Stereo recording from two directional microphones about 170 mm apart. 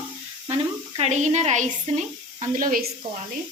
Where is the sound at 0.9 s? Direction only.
40° right (ahead or behind); by 2.9 s 55° right (ahead or behind).